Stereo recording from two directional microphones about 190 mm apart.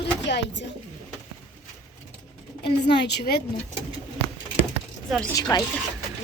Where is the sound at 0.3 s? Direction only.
65° left (ahead or behind).